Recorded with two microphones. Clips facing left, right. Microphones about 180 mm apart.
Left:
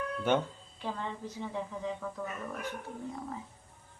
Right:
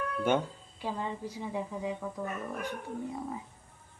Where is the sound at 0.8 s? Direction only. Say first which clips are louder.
Right 2 dB; 10° right (ahead or behind).